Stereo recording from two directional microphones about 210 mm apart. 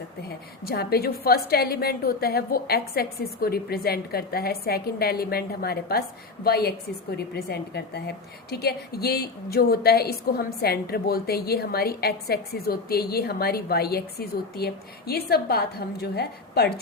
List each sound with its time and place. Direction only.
0.2 s a woman's voice: 50° left (ahead or behind)